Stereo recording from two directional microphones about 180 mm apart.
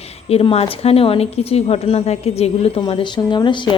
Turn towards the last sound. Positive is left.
turn(degrees=25)  # may be behind; listen again after turning